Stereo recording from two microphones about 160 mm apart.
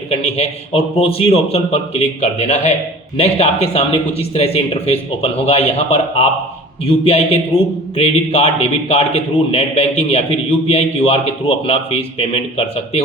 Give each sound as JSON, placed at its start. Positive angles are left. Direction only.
{"t": 0.1, "sound": "speech", "side_deg": 40}